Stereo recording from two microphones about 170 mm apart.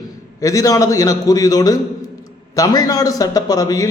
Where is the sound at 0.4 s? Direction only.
20° left (ahead or behind).